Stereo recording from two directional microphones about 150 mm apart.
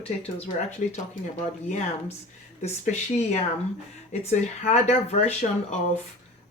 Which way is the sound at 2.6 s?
50° left (ahead or behind).